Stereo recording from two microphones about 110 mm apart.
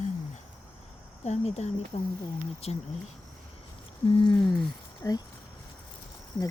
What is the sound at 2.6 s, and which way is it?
Speech, 65° left (ahead or behind).